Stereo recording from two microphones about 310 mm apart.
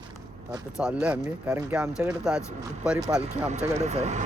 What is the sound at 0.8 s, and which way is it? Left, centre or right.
Speech, centre.